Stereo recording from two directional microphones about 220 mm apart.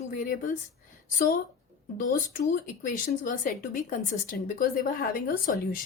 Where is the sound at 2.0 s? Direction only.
35° left (ahead or behind).